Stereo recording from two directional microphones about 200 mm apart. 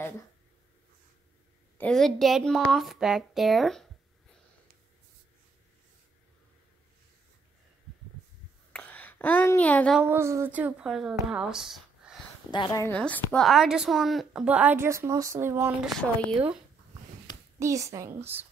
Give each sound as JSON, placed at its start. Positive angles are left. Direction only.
{"t": 1.8, "sound": "a woman's voice", "side_deg": 5}
{"t": 8.7, "sound": "a sound", "side_deg": 5}
{"t": 9.9, "sound": "a woman's voice", "side_deg": -10}
{"t": 12.4, "sound": "speech", "side_deg": 20}
{"t": 12.8, "sound": "a woman's voice", "side_deg": 10}
{"t": 15.9, "sound": "a woman's voice", "side_deg": 5}
{"t": 17.6, "sound": "a woman's voice", "side_deg": -15}